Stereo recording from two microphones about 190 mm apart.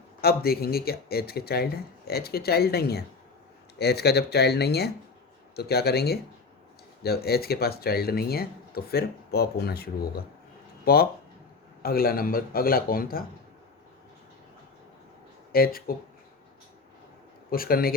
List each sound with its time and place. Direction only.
0.2 s a man's voice: 55° left (ahead or behind)
15.5 s a man's voice: 50° left (ahead or behind)
17.5 s a man's voice: 50° left (ahead or behind)